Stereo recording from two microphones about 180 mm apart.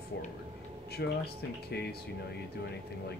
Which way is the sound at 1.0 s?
65° left (ahead or behind).